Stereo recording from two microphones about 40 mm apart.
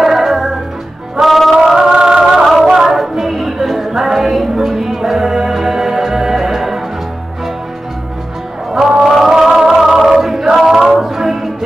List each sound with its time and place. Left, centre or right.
0.0 s music: centre
1.8 s music: centre
8.7 s music: centre
9.1 s a capella: centre